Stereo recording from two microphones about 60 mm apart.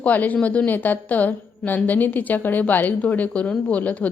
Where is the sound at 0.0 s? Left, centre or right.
Left.